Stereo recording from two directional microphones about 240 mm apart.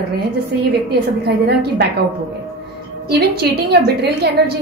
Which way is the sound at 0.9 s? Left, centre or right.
Right.